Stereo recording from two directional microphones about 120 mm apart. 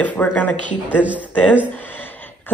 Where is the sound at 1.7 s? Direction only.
15° left (ahead or behind).